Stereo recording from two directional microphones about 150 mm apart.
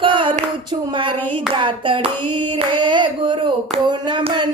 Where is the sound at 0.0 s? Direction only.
35° right (ahead or behind).